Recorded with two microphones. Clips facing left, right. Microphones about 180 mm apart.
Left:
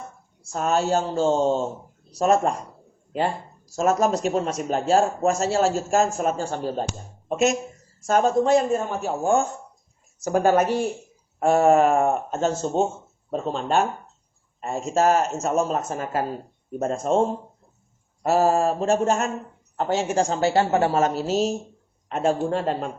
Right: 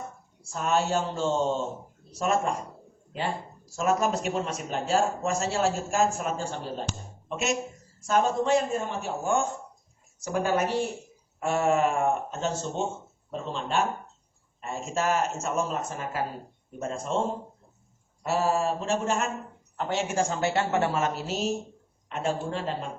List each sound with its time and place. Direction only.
0.5 s speech: 40° left (ahead or behind)
3.8 s speech: 40° left (ahead or behind)
18.2 s speech: 45° left (ahead or behind)